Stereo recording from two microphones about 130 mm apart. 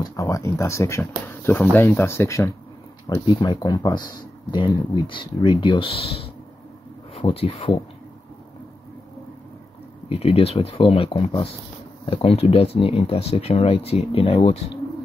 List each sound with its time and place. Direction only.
0.0 s speech: 25° left (ahead or behind)
3.3 s speech: 35° left (ahead or behind)
10.0 s speech: 50° left (ahead or behind)